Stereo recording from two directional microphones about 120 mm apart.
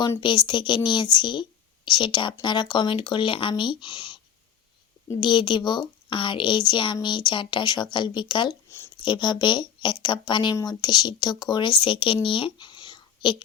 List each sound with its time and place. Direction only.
0.2 s a woman's voice: 40° left (ahead or behind)
5.2 s a woman's voice: 40° left (ahead or behind)
10.5 s a woman's voice: 30° left (ahead or behind)